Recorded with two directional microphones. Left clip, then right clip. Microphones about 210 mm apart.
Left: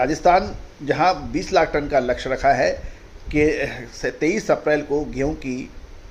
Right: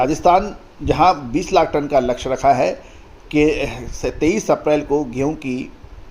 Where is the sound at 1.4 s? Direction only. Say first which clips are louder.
Right 2 dB; 30° right (ahead or behind).